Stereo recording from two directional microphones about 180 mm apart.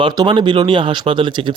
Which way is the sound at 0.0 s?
25° right (ahead or behind).